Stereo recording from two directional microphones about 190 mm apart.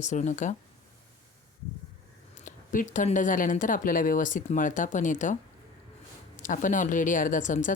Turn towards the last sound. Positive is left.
turn(degrees=40)  # may be behind; listen again after turning